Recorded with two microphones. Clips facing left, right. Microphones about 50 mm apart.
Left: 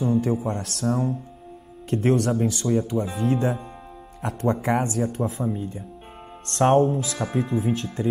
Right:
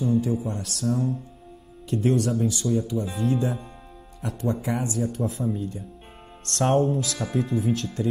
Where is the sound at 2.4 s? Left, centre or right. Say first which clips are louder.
Left 1 dB; left.